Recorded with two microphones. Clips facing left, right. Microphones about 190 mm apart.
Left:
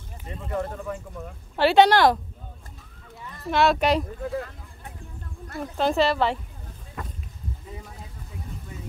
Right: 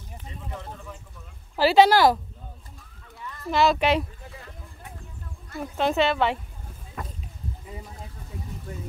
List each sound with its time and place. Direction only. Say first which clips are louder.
0.3 s speech: left 10 dB; 60° left (ahead or behind)
1.6 s speech: even; centre (ahead or behind)
3.4 s speech: left 1 dB; centre (ahead or behind)
4.2 s speech: left 15 dB; 60° left (ahead or behind)
5.6 s speech: left 1 dB; centre (ahead or behind)